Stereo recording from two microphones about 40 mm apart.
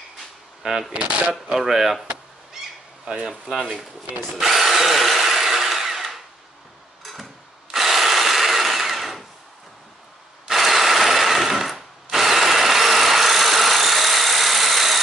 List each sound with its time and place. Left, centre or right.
0.6 s a sound: centre
0.9 s speech: right
1.3 s speech: centre
3.3 s speech: centre
4.4 s drill: centre
7.0 s a sound: centre
7.7 s tools: centre
10.4 s sewing machine: centre